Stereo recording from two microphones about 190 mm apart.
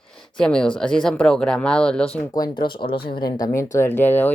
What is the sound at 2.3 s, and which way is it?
Speech, 20° left (ahead or behind).